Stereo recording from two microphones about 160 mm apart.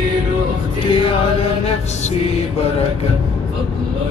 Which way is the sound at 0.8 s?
35° left (ahead or behind).